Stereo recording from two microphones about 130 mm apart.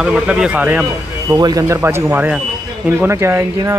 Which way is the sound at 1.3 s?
30° right (ahead or behind).